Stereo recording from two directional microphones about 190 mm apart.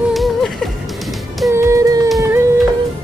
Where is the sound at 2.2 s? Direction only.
15° right (ahead or behind).